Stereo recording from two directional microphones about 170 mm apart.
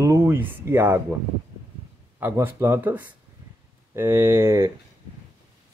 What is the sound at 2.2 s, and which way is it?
Speech, 15° right (ahead or behind).